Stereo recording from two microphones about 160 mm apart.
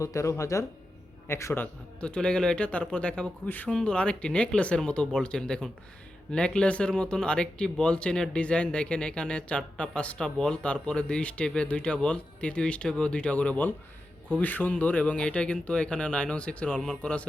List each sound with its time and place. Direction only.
0.0 s speech: 20° left (ahead or behind)